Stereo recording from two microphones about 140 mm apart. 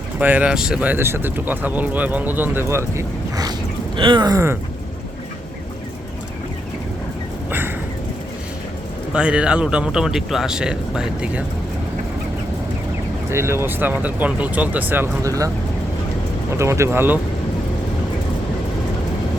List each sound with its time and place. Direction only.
0.2 s speech: 10° right (ahead or behind)
3.9 s a sound: 35° right (ahead or behind)
9.1 s speech: 5° right (ahead or behind)
13.3 s speech: 20° right (ahead or behind)
16.5 s speech: 20° right (ahead or behind)